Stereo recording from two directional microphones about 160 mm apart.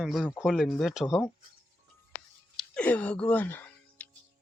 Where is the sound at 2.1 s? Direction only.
50° left (ahead or behind).